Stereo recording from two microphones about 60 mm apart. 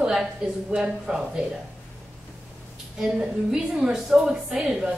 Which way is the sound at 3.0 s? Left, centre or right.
Centre.